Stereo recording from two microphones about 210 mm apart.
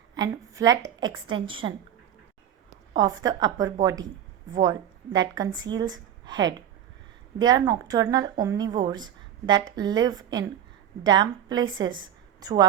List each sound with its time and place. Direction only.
0.1 s a woman's voice: 15° right (ahead or behind)
2.9 s a woman's voice: 20° right (ahead or behind)